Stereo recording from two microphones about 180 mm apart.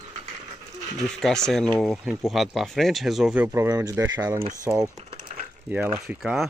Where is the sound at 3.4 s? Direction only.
20° right (ahead or behind).